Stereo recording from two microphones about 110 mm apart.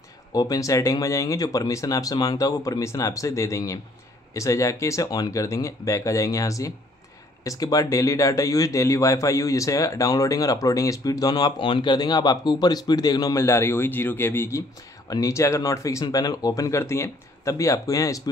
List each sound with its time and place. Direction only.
0.3 s speech: 35° left (ahead or behind)
13.4 s speech: 25° left (ahead or behind)
15.0 s speech: 30° left (ahead or behind)